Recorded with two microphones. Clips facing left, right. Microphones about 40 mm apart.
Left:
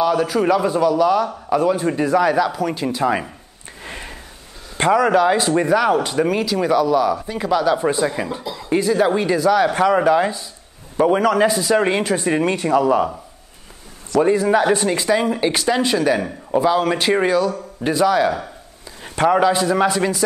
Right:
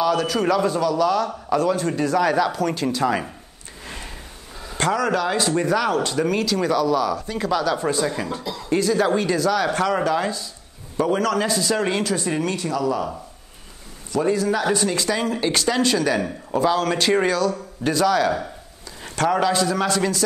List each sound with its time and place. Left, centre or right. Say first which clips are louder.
0.0 s speech: left 3 dB; centre
3.8 s a sound: left 3 dB; centre
4.7 s speech: left 6 dB; left
14.2 s speech: left 5 dB; left